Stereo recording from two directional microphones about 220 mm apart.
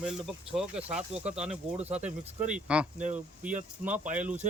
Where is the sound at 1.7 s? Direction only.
30° right (ahead or behind).